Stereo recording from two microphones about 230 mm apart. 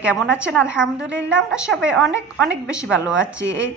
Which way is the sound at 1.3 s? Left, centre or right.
Centre.